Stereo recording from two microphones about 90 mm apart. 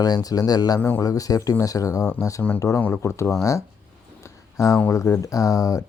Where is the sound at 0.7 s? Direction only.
25° left (ahead or behind).